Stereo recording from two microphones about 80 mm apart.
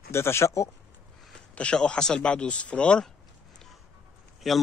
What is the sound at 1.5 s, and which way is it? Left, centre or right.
Speech, centre.